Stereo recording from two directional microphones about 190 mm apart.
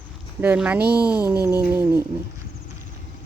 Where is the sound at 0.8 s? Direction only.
55° right (ahead or behind).